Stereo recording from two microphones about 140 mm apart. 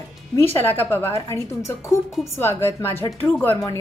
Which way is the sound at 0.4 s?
15° left (ahead or behind).